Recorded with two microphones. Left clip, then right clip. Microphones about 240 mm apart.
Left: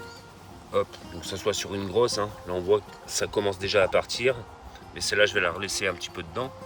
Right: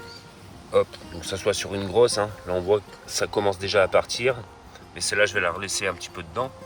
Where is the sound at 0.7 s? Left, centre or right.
Centre.